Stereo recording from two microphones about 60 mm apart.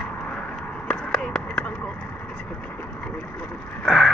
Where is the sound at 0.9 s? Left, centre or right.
Centre.